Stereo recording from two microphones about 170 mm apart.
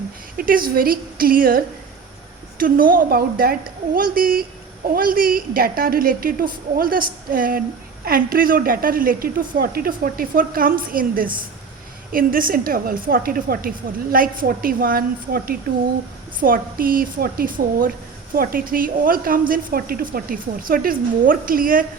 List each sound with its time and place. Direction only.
0.3 s a woman's voice: 55° right (ahead or behind)